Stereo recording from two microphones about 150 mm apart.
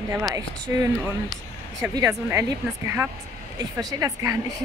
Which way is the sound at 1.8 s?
20° right (ahead or behind).